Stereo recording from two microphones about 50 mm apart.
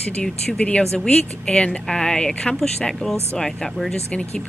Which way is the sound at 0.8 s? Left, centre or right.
Centre.